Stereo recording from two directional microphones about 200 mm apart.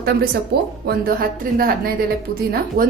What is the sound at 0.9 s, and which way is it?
Speech, 45° right (ahead or behind).